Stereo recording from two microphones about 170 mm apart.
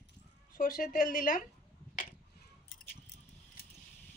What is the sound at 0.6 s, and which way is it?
Speech, 60° left (ahead or behind).